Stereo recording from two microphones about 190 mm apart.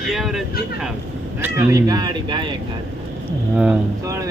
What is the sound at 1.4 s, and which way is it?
A man's voice, 15° right (ahead or behind).